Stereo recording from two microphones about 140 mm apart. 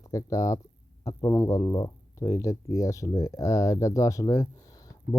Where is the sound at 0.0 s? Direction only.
25° left (ahead or behind).